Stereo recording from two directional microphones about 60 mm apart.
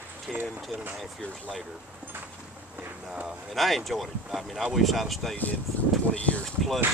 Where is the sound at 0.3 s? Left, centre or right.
Right.